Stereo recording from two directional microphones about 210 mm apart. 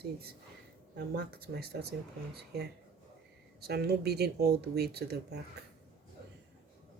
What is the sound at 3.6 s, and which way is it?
Speech, 50° right (ahead or behind).